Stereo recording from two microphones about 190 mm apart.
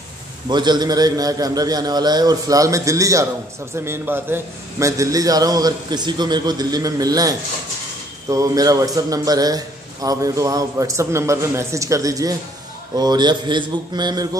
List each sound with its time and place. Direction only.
0.5 s a man's voice: 20° right (ahead or behind)